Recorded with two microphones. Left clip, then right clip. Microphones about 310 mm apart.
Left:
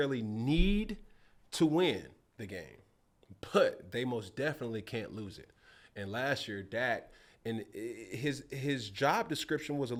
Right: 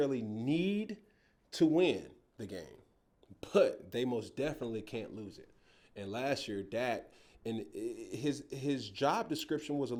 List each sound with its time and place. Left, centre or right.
0.0 s speech: left